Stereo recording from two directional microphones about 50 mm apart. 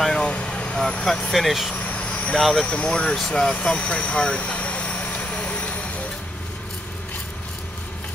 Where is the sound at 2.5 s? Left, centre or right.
Centre.